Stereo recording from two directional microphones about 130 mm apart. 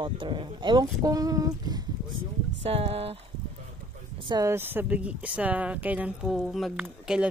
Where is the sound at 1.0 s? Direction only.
30° right (ahead or behind).